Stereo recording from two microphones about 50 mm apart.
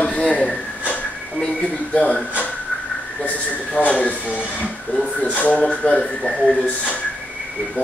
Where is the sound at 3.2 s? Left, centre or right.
Left.